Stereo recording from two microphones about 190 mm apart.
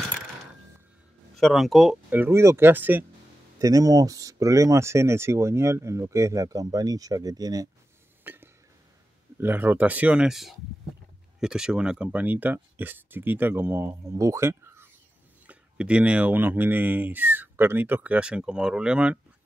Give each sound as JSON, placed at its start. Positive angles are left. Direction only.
{"t": 1.3, "sound": "speech", "side_deg": 0}
{"t": 8.2, "sound": "a sound", "side_deg": -10}
{"t": 9.4, "sound": "speech", "side_deg": -10}